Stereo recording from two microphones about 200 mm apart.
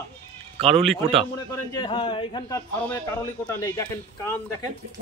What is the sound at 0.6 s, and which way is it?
Speech, 30° right (ahead or behind).